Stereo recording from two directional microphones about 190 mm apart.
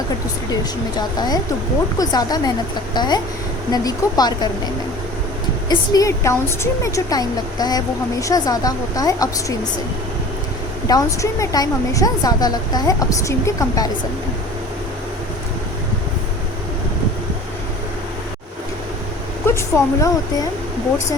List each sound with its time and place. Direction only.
0.5 s a woman's voice: 20° left (ahead or behind)
10.8 s a woman's voice: 20° left (ahead or behind)
19.5 s speech: 15° left (ahead or behind)